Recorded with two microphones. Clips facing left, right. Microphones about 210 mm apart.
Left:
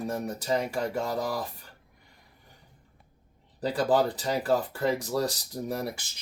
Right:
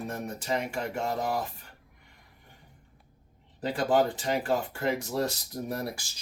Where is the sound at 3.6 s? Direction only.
35° left (ahead or behind).